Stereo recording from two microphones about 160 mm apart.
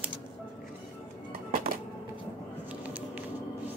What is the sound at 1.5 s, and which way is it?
Music, 65° right (ahead or behind).